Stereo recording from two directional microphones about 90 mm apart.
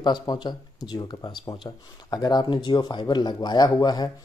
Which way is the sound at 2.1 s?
45° left (ahead or behind).